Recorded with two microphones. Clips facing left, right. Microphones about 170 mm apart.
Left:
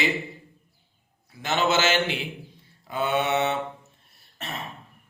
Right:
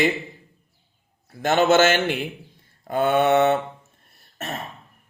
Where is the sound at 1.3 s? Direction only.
50° right (ahead or behind).